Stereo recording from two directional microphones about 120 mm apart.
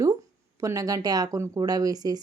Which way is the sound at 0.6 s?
30° right (ahead or behind).